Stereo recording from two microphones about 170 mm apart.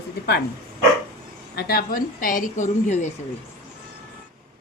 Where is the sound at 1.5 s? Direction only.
65° left (ahead or behind); by 3.1 s 45° left (ahead or behind).